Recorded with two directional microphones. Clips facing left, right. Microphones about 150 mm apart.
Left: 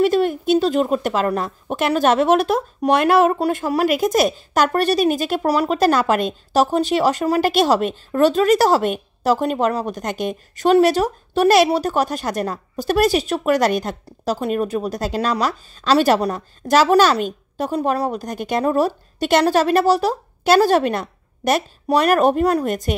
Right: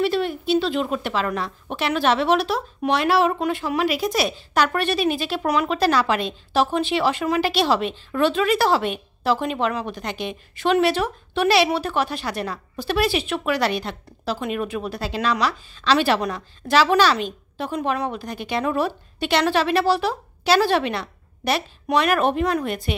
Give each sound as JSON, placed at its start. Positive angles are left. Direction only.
{"t": 0.0, "sound": "speech", "side_deg": 45}